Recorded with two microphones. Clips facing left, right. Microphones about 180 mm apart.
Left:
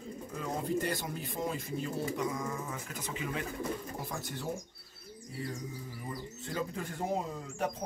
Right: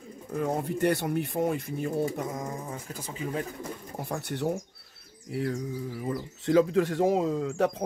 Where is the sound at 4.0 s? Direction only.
65° right (ahead or behind).